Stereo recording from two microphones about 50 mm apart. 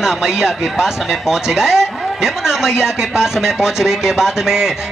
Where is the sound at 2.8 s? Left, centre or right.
Centre.